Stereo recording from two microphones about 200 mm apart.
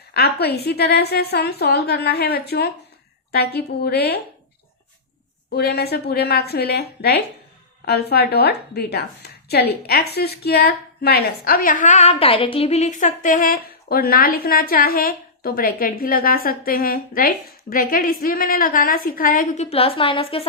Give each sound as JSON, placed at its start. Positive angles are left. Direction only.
{"t": 0.1, "sound": "a woman's voice", "side_deg": 50}
{"t": 5.5, "sound": "a woman's voice", "side_deg": 55}
{"t": 19.7, "sound": "a woman's voice", "side_deg": 30}